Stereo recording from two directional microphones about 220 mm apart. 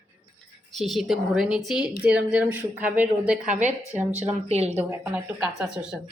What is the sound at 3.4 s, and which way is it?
A woman's voice, 35° right (ahead or behind).